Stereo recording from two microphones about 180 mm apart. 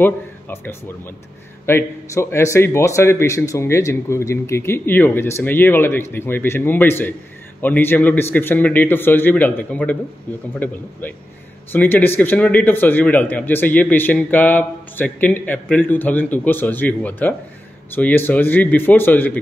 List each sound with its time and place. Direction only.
0.0 s a man's voice: 10° left (ahead or behind)